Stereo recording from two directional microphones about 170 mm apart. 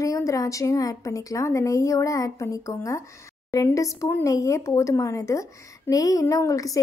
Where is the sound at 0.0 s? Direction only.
20° left (ahead or behind).